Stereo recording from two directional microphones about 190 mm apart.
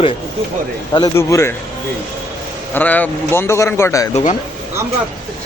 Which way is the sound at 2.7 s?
10° left (ahead or behind).